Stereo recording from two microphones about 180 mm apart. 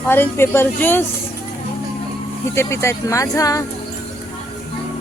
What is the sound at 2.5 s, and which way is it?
Speech, 15° left (ahead or behind).